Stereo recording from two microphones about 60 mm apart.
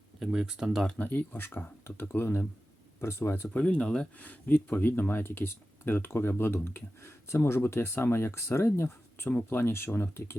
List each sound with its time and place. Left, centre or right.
0.2 s speech: centre
1.0 s speech: left
3.5 s speech: centre
4.2 s speech: left